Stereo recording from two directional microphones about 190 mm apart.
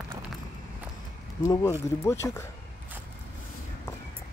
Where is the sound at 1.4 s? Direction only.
15° left (ahead or behind).